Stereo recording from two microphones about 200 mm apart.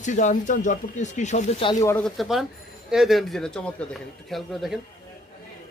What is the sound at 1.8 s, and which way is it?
Speech, 10° left (ahead or behind).